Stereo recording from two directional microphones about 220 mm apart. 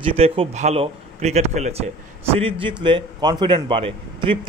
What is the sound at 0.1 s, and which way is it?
A man's voice, 25° right (ahead or behind).